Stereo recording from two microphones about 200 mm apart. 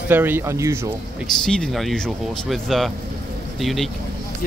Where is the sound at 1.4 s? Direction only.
5° left (ahead or behind).